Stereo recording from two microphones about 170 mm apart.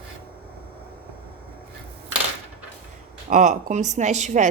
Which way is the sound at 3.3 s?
45° right (ahead or behind).